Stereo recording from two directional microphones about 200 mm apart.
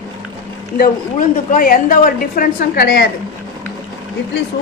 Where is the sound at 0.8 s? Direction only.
45° left (ahead or behind).